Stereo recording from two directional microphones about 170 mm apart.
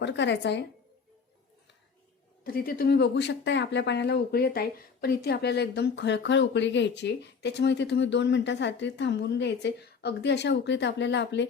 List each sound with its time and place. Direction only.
0.0 s speech: 90° left
2.4 s speech: 60° left (ahead or behind); by 11.4 s 90° left